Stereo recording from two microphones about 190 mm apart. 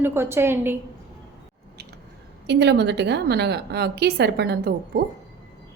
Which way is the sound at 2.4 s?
65° right (ahead or behind).